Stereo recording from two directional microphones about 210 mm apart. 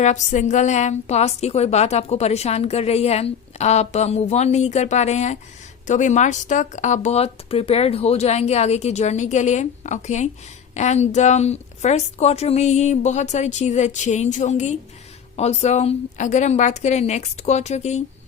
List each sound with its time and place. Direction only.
0.0 s a woman's voice: 35° left (ahead or behind)